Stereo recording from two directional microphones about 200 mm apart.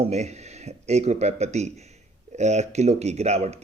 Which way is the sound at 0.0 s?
35° right (ahead or behind).